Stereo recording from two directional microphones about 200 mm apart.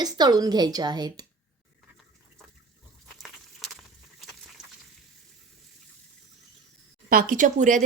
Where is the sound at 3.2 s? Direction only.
Centre (ahead or behind).